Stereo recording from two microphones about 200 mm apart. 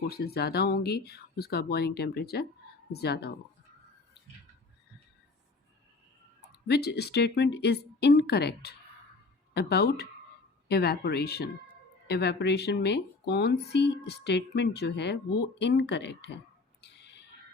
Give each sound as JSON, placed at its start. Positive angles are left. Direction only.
{"t": 0.1, "sound": "speech", "side_deg": 50}
{"t": 6.7, "sound": "speech", "side_deg": 55}
{"t": 16.8, "sound": "bird", "side_deg": 55}